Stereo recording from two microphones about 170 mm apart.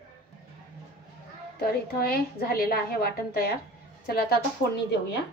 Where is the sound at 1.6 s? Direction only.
60° left (ahead or behind).